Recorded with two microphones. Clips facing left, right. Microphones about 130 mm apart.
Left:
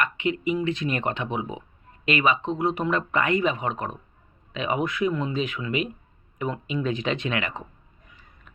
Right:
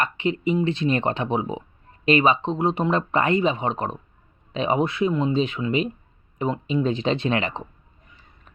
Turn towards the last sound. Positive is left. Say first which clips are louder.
# right 4 dB
turn(degrees=-30)  # may be behind; listen again after turning